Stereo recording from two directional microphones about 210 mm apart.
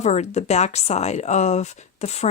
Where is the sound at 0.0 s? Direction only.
30° left (ahead or behind).